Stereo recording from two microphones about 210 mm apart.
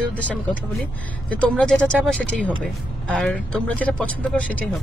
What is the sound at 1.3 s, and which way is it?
Speech, 5° left (ahead or behind).